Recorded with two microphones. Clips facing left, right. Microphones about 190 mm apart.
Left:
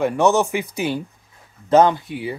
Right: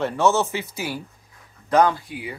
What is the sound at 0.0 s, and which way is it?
Speech, 15° left (ahead or behind).